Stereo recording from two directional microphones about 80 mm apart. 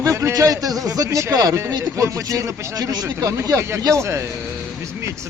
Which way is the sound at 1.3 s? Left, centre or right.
Right.